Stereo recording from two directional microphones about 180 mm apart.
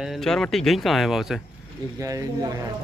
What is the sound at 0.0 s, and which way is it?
Speech, centre (ahead or behind).